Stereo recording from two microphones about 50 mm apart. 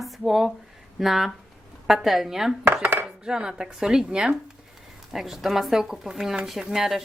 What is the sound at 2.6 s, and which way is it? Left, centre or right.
Dishes, right.